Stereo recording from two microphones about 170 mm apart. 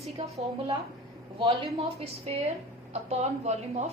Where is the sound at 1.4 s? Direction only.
35° right (ahead or behind).